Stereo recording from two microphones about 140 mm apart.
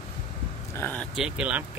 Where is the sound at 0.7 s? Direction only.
10° left (ahead or behind).